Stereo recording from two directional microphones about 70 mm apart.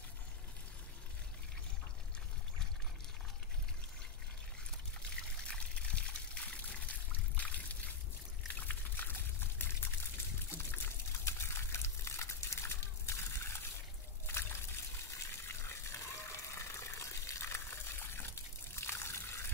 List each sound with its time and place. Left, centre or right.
5.5 s trickle: centre
8.5 s pour: left
10.5 s a sound: left
14.2 s water: left